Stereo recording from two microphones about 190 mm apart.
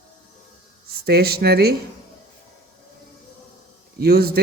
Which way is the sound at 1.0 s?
55° right (ahead or behind).